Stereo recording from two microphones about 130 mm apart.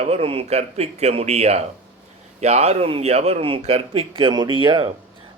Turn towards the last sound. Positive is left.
turn(degrees=-40)  # may be behind; listen again after turning